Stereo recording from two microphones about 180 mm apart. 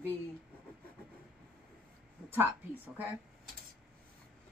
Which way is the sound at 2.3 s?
10° right (ahead or behind).